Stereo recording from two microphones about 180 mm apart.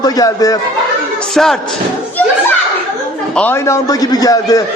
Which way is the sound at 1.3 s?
Centre (ahead or behind).